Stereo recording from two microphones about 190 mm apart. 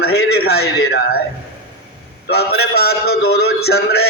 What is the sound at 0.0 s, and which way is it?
A man's voice, 55° left (ahead or behind).